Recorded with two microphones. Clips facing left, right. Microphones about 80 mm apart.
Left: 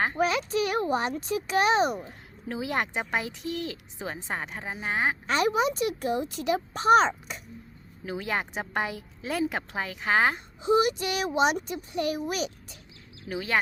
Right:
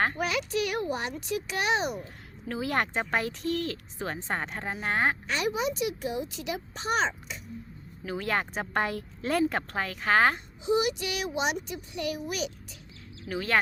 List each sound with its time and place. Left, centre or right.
0.2 s a child's voice: left
2.5 s speech: centre
5.2 s a child's voice: left
8.0 s speech: centre
10.6 s a child's voice: left
13.2 s speech: centre